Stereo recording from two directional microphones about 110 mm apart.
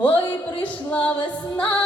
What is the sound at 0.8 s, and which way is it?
Music, 10° left (ahead or behind).